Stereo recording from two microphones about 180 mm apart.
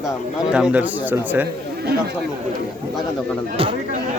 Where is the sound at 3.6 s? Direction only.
30° right (ahead or behind).